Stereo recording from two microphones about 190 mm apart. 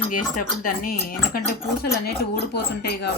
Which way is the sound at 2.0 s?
55° left (ahead or behind).